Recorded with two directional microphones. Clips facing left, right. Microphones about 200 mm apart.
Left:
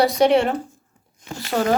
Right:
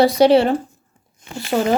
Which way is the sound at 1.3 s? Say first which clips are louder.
Right 3 dB; 25° right (ahead or behind).